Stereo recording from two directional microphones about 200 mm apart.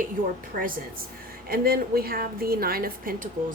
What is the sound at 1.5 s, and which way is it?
Speech, 50° right (ahead or behind).